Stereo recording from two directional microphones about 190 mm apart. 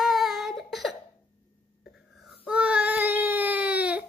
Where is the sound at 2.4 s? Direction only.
5° right (ahead or behind).